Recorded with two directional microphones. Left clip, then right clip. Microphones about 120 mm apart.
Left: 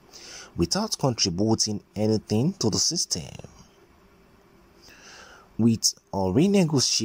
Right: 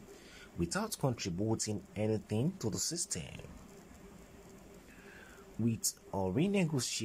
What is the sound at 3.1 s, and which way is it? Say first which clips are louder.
Speech: left 12 dB; 30° left (ahead or behind).